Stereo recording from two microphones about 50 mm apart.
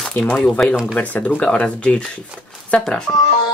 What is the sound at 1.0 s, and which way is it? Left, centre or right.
Speech, left.